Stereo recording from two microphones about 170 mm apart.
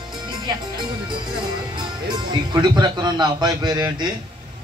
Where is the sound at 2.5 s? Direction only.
25° right (ahead or behind).